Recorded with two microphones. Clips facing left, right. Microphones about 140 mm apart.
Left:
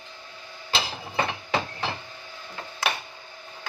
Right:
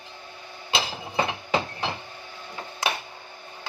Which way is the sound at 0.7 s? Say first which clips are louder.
Right 1 dB; 15° right (ahead or behind).